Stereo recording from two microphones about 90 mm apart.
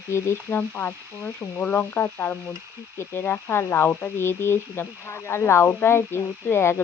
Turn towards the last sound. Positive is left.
turn(degrees=25)  # may be behind; listen again after turning